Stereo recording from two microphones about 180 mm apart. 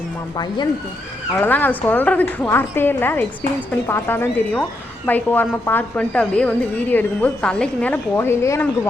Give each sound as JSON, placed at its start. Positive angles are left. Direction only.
{"t": 0.3, "sound": "speech", "side_deg": 20}
{"t": 1.4, "sound": "a woman's voice", "side_deg": 10}